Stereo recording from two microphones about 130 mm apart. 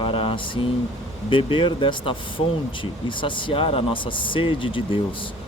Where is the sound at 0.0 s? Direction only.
45° left (ahead or behind).